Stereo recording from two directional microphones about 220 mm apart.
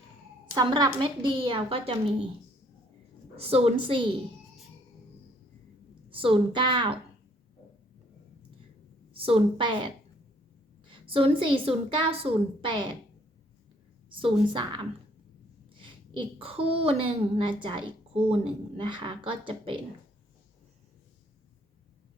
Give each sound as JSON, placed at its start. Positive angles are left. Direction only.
{"t": 0.5, "sound": "a woman's voice", "side_deg": -20}
{"t": 3.3, "sound": "a woman's voice", "side_deg": -25}
{"t": 6.1, "sound": "a woman's voice", "side_deg": -25}
{"t": 9.1, "sound": "a woman's voice", "side_deg": -25}
{"t": 10.8, "sound": "a woman's voice", "side_deg": -25}
{"t": 14.1, "sound": "a woman's voice", "side_deg": -25}
{"t": 15.8, "sound": "a woman's voice", "side_deg": -20}